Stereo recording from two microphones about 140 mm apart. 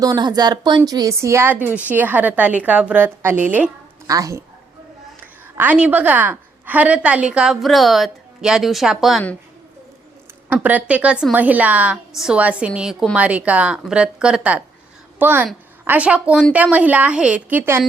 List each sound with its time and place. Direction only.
0.0 s a woman's voice: 30° right (ahead or behind); by 3.7 s 10° right (ahead or behind)
4.0 s a woman's voice: 25° right (ahead or behind)
5.2 s a woman's voice: 10° right (ahead or behind)
10.5 s a woman's voice: 10° right (ahead or behind)